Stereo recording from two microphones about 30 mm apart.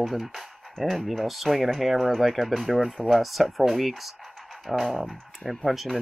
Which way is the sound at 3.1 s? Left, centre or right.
Centre.